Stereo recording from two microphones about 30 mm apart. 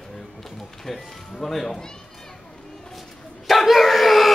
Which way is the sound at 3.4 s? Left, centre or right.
Centre.